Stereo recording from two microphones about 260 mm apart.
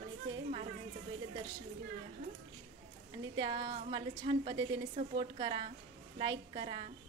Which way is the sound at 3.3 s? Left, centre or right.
Centre.